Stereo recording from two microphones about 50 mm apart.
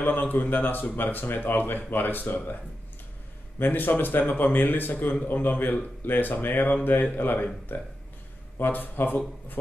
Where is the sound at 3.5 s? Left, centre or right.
Left.